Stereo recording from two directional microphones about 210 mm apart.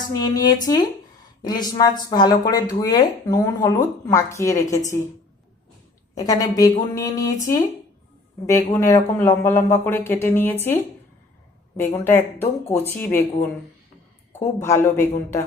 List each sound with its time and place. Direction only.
0.1 s speech: 20° left (ahead or behind)
6.1 s speech: 15° left (ahead or behind)
8.4 s speech: 15° left (ahead or behind)